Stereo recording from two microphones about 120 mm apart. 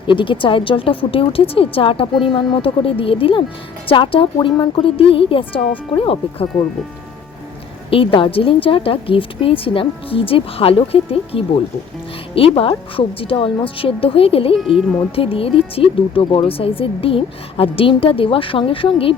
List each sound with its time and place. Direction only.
0.1 s speech: 45° left (ahead or behind)
7.9 s speech: 45° left (ahead or behind)